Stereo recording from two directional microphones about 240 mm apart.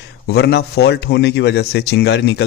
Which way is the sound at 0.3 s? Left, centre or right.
Left.